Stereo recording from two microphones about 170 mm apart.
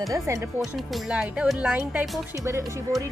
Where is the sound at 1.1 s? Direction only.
5° right (ahead or behind).